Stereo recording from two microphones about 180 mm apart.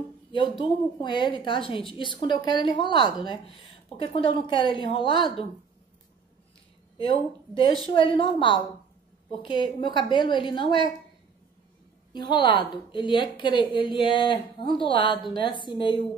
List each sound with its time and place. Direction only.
0.3 s a woman's voice: 25° left (ahead or behind)
7.1 s a woman's voice: 30° left (ahead or behind)
12.1 s a woman's voice: 25° left (ahead or behind)